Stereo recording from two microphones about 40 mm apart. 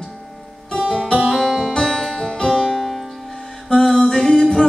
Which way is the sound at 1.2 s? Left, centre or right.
Centre.